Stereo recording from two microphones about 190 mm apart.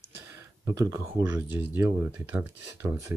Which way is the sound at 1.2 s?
15° right (ahead or behind).